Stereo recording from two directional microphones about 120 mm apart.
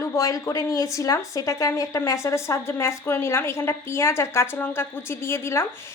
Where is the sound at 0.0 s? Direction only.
25° left (ahead or behind).